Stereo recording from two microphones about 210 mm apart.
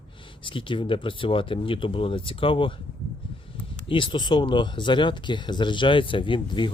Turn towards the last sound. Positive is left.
turn(degrees=25)  # may be behind; listen again after turning